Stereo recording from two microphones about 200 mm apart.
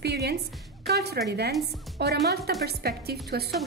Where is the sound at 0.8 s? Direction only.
55° right (ahead or behind).